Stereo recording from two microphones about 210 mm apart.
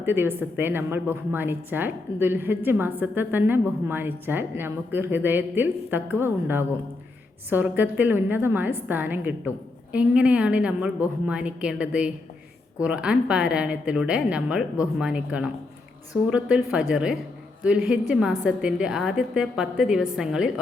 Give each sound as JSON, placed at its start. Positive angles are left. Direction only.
{"t": 0.0, "sound": "a woman's voice", "side_deg": -10}